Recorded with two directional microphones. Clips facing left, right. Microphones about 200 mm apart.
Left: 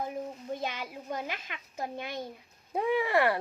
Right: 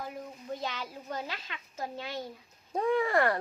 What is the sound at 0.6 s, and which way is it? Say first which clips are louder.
A child's voice: left 1 dB; 20° left (ahead or behind).